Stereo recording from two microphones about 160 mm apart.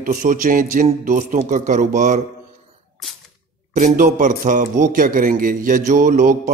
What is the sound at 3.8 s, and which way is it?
A man's voice, 50° right (ahead or behind).